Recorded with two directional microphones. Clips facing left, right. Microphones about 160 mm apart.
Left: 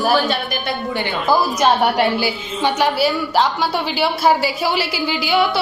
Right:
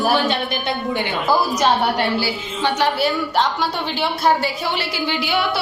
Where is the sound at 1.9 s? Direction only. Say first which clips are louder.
Left 3 dB; 15° left (ahead or behind).